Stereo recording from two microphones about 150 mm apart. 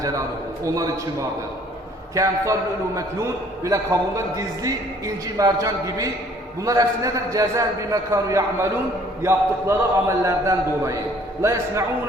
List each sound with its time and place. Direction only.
0.6 s a man's voice: 25° right (ahead or behind)
2.1 s a man's voice: 20° right (ahead or behind)